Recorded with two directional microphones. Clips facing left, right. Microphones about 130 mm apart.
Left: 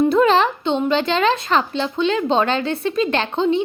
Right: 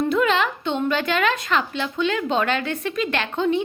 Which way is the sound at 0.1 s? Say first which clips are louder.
Left 5 dB; 35° left (ahead or behind).